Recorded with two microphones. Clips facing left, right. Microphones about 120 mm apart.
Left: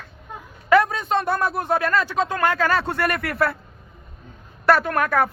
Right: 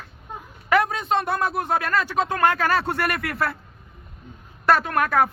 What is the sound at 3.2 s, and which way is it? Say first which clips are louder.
Speech: left 3 dB; 35° left (ahead or behind).